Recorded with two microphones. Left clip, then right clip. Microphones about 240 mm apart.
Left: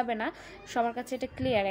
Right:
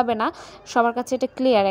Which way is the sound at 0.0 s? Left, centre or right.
Right.